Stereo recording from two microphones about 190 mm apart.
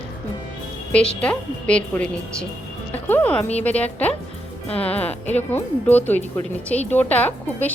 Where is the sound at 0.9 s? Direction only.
5° left (ahead or behind).